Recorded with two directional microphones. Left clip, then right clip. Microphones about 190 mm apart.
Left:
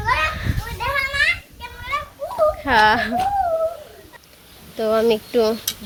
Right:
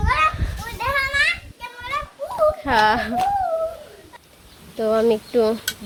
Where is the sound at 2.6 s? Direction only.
Centre (ahead or behind).